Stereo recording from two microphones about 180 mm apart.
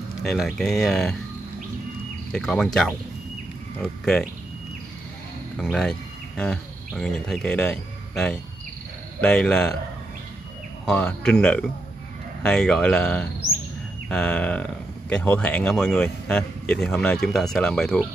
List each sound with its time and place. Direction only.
0.2 s speech: centre (ahead or behind)
2.3 s speech: 5° left (ahead or behind)
5.6 s speech: 5° left (ahead or behind)
10.9 s speech: 5° left (ahead or behind)